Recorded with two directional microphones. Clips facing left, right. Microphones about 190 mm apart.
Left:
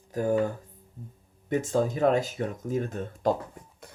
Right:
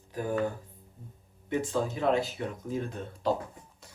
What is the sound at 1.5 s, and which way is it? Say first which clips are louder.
Speech: left 4 dB; 45° left (ahead or behind).